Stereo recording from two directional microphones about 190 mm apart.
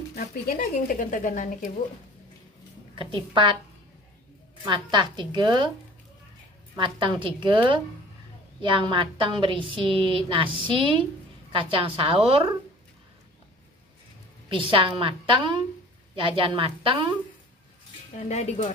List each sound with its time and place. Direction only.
0.1 s speech: 50° left (ahead or behind)
3.0 s a woman's voice: 25° right (ahead or behind)
4.6 s a woman's voice: 25° right (ahead or behind)
6.8 s a woman's voice: 25° right (ahead or behind)
14.5 s a woman's voice: 25° right (ahead or behind)
18.3 s speech: 35° left (ahead or behind)